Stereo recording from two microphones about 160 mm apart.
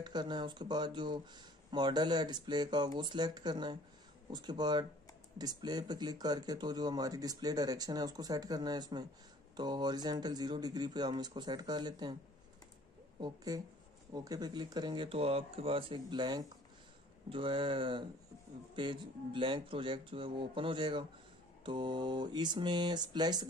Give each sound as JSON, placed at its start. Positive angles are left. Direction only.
{"t": 0.0, "sound": "speech", "side_deg": -25}
{"t": 13.2, "sound": "speech", "side_deg": -25}